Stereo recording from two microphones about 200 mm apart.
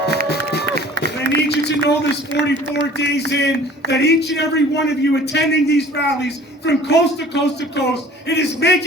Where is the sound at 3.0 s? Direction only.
55° left (ahead or behind).